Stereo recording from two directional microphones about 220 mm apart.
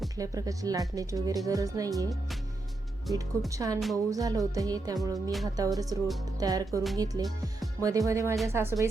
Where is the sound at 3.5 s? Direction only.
15° right (ahead or behind).